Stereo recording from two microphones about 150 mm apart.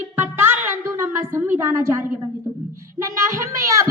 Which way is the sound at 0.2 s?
15° right (ahead or behind).